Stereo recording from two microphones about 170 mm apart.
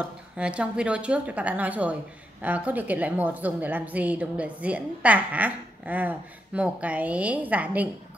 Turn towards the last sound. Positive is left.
turn(degrees=-10)  # may be behind; listen again after turning